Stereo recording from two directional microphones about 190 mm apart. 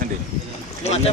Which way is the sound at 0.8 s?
35° left (ahead or behind).